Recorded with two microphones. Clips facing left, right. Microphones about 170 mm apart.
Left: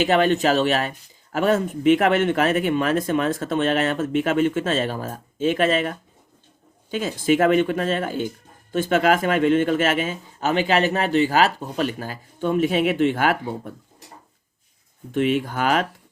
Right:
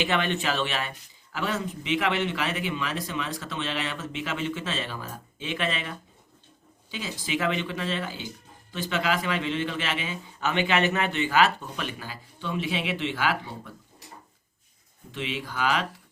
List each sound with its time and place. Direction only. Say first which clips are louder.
0.0 s speech: left 8 dB; 40° left (ahead or behind)
15.1 s speech: left 12 dB; 50° left (ahead or behind)